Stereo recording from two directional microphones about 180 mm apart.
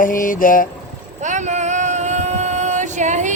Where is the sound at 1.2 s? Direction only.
40° right (ahead or behind).